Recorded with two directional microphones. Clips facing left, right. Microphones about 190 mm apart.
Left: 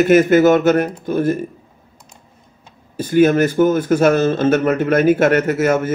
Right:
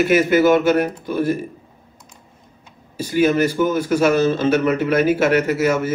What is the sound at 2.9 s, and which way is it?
Speech, 50° left (ahead or behind).